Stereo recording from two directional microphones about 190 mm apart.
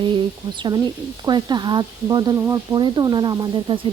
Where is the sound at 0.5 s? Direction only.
25° right (ahead or behind).